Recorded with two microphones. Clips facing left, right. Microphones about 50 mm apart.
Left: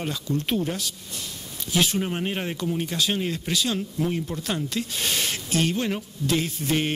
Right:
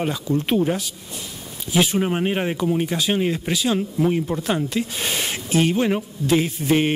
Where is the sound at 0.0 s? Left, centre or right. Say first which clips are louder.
Right 5 dB; centre.